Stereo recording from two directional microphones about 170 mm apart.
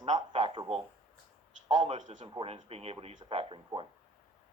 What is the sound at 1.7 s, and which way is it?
Speech, 45° right (ahead or behind).